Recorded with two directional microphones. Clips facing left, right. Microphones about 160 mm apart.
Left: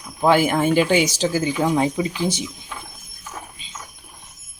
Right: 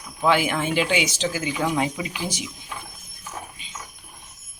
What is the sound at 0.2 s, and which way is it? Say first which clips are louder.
Speech: left 4 dB; 45° left (ahead or behind).